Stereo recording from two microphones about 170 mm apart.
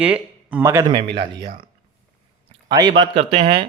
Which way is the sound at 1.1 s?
30° right (ahead or behind).